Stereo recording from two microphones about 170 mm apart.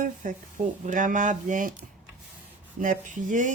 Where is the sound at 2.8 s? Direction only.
50° right (ahead or behind).